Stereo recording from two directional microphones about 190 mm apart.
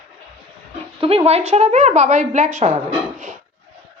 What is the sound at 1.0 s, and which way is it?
Speech, 30° right (ahead or behind).